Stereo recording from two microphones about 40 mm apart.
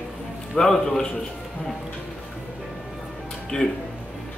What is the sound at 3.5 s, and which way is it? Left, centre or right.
Speech, left.